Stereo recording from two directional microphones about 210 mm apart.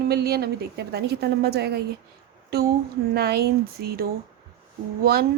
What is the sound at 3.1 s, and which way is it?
A woman's voice, 50° right (ahead or behind).